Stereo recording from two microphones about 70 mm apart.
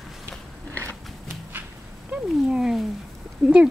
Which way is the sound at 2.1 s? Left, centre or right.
Centre.